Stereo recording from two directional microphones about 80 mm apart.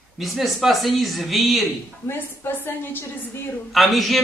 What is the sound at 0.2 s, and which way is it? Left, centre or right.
A man's voice, centre.